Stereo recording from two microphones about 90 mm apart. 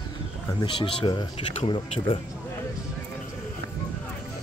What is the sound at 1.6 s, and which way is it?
Speech, 80° left.